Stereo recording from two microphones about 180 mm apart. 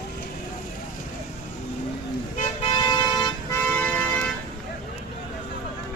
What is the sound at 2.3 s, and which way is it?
Vehicle, 35° left (ahead or behind).